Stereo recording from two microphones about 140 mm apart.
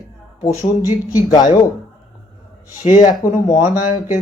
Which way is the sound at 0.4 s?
50° left (ahead or behind).